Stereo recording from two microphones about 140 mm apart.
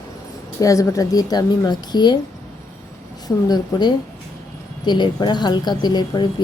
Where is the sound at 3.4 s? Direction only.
30° left (ahead or behind).